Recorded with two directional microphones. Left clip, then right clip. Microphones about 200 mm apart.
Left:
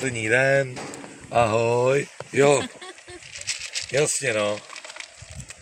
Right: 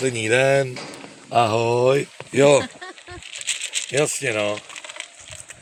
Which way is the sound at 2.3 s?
35° right (ahead or behind).